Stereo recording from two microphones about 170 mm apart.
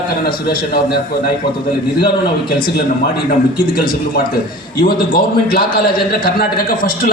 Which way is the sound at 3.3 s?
60° left (ahead or behind).